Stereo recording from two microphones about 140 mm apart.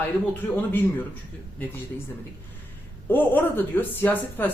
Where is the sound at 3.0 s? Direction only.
15° left (ahead or behind).